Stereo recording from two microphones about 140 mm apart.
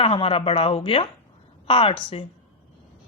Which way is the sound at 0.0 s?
40° left (ahead or behind).